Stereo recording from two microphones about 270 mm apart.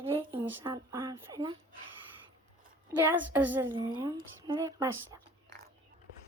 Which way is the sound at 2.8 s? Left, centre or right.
Centre.